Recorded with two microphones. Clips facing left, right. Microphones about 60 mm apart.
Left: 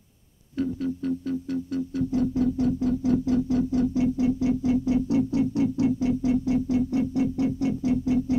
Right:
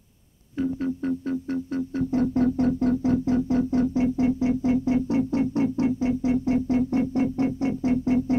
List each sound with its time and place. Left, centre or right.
0.6 s music: right